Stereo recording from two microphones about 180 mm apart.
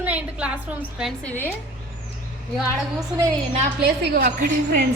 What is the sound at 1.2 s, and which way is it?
Speech, 10° left (ahead or behind).